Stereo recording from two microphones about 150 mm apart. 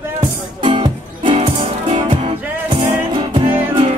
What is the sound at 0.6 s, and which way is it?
Music, 35° right (ahead or behind).